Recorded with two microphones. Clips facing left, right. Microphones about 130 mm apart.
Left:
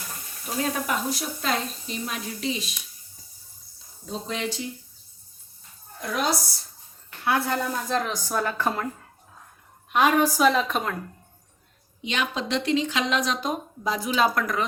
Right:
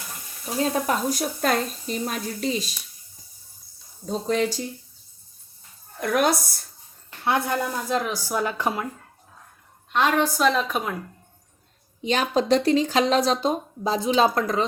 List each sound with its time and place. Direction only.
0.6 s speech: 40° right (ahead or behind)
4.0 s speech: 40° right (ahead or behind)
6.0 s a woman's voice: 55° right (ahead or behind)
7.3 s speech: 15° right (ahead or behind)
9.9 s a woman's voice: 10° left (ahead or behind)
12.0 s speech: 40° right (ahead or behind)